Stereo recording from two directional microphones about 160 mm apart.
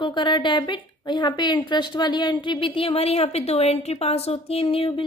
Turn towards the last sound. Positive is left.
turn(degrees=35)  # may be behind; listen again after turning